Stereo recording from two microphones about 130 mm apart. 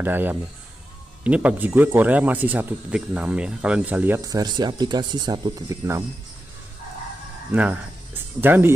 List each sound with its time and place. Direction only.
0.0 s speech: 15° right (ahead or behind)
4.2 s speech: 30° right (ahead or behind)
7.5 s speech: 10° right (ahead or behind)